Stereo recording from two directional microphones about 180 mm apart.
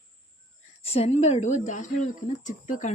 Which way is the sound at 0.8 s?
35° left (ahead or behind).